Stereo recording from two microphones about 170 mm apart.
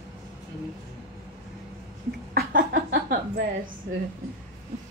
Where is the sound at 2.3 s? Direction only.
60° right (ahead or behind).